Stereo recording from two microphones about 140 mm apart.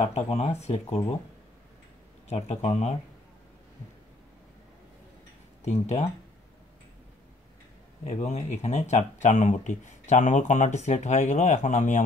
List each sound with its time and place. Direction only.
0.0 s speech: 50° left (ahead or behind)
2.2 s speech: 50° left (ahead or behind)
5.6 s speech: 55° left (ahead or behind)
8.0 s speech: 50° left (ahead or behind)